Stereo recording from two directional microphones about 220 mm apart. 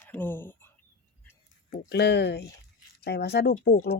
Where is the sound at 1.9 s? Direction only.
50° left (ahead or behind).